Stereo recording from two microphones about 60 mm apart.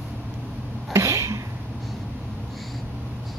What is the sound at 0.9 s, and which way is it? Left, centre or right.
Sneeze, right.